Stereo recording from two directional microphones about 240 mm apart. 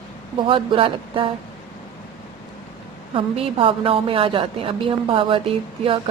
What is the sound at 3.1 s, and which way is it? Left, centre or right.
A woman's voice, right.